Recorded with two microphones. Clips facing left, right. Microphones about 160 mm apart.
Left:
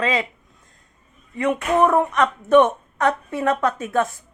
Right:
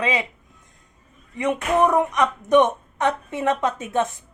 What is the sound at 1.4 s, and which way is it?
Speech, 20° right (ahead or behind).